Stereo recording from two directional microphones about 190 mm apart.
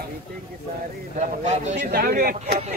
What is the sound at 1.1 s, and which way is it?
Speech, 40° right (ahead or behind).